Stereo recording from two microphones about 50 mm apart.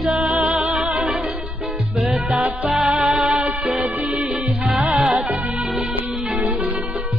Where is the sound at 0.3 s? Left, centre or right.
Right.